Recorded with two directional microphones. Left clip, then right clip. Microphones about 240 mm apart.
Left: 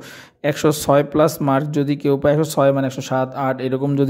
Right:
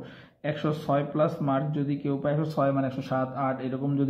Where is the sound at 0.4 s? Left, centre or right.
Left.